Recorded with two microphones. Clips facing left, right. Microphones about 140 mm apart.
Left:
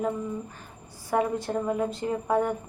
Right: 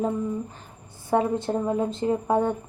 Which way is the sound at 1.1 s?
25° right (ahead or behind).